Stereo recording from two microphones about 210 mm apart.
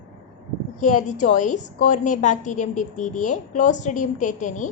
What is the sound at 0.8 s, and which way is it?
A woman's voice, 35° left (ahead or behind).